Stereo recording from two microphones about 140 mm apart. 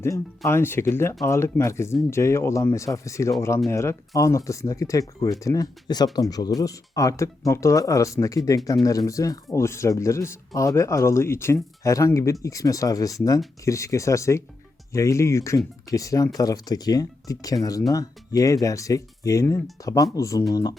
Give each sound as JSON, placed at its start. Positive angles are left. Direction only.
{"t": 0.0, "sound": "speech", "side_deg": 20}